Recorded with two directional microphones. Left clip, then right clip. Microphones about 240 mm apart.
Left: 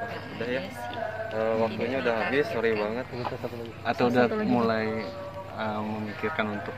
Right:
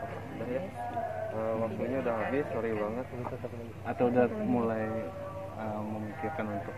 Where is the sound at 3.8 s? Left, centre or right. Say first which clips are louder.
Left 4 dB; left.